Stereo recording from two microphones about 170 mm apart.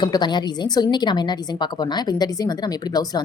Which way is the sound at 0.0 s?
25° left (ahead or behind).